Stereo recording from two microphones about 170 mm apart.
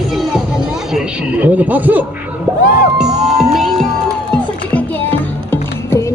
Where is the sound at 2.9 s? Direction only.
5° right (ahead or behind).